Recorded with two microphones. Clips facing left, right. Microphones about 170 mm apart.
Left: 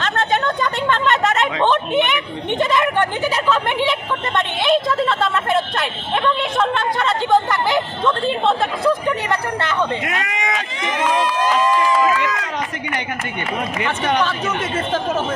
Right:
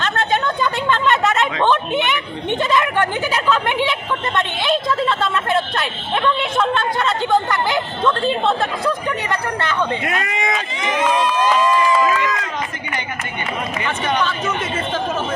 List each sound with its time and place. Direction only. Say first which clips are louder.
4.6 s a woman's voice: left 3 dB; centre (ahead or behind)
7.1 s chatter: left 2 dB; centre (ahead or behind)
8.4 s a woman's voice: left 2 dB; centre (ahead or behind)
10.2 s run: right 1 dB; 35° right (ahead or behind)